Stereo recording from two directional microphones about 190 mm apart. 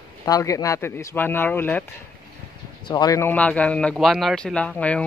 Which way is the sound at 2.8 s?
20° left (ahead or behind).